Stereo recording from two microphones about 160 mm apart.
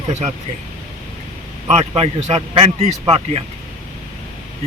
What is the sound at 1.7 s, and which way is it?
Speech, 40° right (ahead or behind).